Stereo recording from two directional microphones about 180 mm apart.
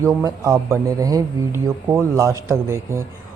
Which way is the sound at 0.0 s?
15° right (ahead or behind).